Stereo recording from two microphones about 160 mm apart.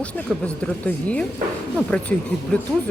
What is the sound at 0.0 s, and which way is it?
Speech, 5° left (ahead or behind).